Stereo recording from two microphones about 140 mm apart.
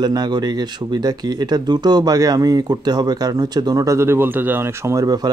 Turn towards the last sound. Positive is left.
turn(degrees=-25)  # may be behind; listen again after turning